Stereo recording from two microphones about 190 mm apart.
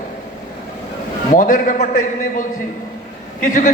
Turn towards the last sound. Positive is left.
turn(degrees=40)  # may be behind; listen again after turning